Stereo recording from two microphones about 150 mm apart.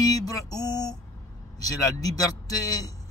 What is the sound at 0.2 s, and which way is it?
Speech, 25° left (ahead or behind).